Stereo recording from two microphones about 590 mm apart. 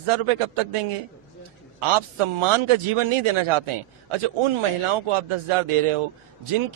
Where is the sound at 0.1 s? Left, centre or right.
Right.